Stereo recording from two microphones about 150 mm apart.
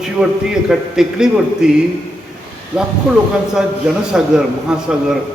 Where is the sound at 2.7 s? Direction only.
5° right (ahead or behind).